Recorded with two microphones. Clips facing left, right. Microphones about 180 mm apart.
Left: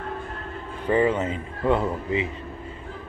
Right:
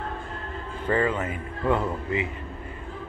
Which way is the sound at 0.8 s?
20° left (ahead or behind).